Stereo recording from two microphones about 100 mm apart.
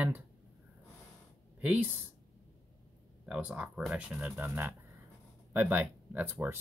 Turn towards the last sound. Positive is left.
turn(degrees=-20)  # may be behind; listen again after turning